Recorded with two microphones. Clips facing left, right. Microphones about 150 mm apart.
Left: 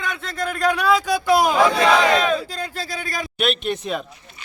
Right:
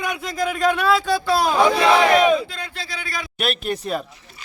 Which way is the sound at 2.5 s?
40° left (ahead or behind).